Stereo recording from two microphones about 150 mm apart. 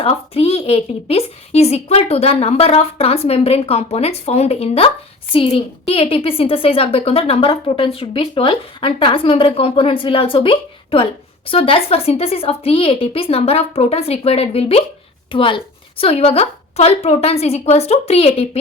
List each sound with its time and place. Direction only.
0.0 s a woman's voice: 40° left (ahead or behind)